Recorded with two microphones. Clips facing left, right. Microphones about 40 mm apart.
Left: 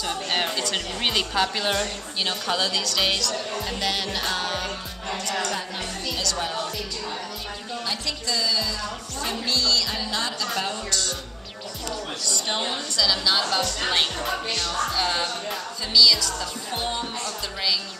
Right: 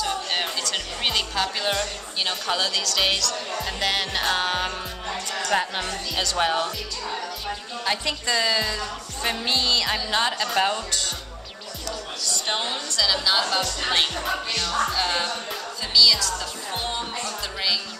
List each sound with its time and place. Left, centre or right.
0.0 s music: centre
0.7 s a woman's voice: centre; by 4.7 s right
5.5 s speech: right
8.3 s speech: right
9.2 s music: right
10.1 s speech: right
12.4 s a woman's voice: centre